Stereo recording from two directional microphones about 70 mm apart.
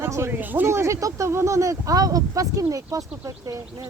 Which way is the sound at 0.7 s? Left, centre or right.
Right.